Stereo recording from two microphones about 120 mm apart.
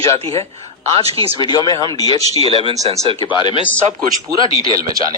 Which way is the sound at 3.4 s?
40° left (ahead or behind).